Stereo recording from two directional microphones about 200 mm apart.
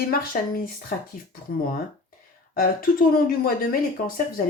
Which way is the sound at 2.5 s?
45° left (ahead or behind).